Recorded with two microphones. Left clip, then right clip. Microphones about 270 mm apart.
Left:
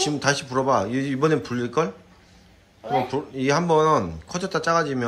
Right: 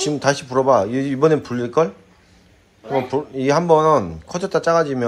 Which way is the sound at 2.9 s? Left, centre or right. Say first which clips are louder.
Right 3 dB; centre.